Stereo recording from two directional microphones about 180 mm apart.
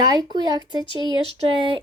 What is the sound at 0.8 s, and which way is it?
Speech, 30° left (ahead or behind).